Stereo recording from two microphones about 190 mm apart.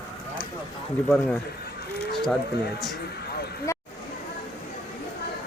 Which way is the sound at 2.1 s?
Centre (ahead or behind).